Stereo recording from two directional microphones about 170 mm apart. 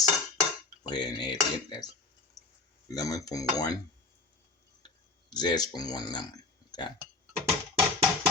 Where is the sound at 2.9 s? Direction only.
20° left (ahead or behind).